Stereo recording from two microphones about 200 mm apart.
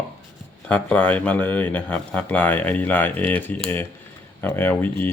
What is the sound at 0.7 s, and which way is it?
Speech, 5° left (ahead or behind).